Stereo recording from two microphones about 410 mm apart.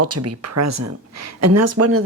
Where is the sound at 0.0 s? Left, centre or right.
Right.